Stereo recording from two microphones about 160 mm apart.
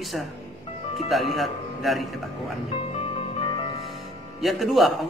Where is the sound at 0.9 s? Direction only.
Centre (ahead or behind).